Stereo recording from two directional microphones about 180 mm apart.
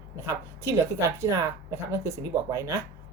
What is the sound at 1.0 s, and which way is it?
A woman's voice, 15° right (ahead or behind).